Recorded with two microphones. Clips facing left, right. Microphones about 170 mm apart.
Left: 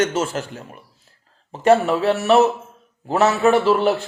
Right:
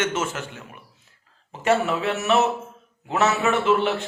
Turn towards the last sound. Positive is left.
turn(degrees=35)  # may be behind; listen again after turning